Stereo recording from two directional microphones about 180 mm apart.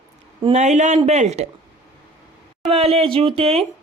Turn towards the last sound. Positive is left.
turn(degrees=-30)  # may be behind; listen again after turning